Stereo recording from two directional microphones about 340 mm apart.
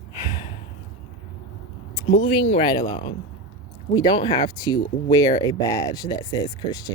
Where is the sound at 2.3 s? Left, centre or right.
Centre.